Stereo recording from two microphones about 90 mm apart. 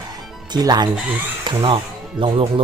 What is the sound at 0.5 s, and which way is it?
Speech, 50° right (ahead or behind).